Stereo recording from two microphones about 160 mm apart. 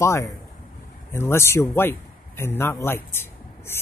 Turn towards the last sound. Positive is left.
turn(degrees=15)  # may be behind; listen again after turning